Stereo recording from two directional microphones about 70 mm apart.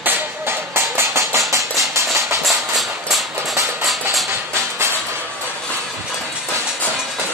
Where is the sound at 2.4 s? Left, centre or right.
Centre.